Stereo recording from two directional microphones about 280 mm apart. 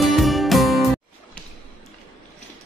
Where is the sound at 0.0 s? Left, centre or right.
Centre.